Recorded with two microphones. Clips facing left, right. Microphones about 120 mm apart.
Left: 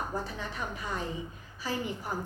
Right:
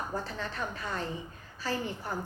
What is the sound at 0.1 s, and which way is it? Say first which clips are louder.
A woman's voice: even; 15° left (ahead or behind).